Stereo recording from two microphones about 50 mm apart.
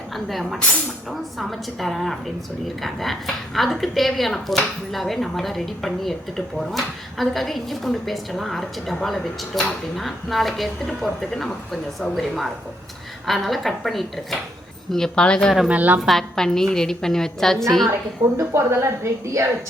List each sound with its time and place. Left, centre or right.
0.3 s a woman's voice: centre
15.7 s a woman's voice: right
16.0 s a woman's voice: centre
18.2 s speech: right
18.5 s a woman's voice: right